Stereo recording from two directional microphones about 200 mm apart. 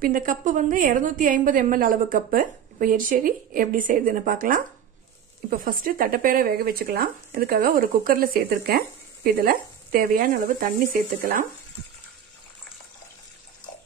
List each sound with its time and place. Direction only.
0.0 s speech: 45° right (ahead or behind)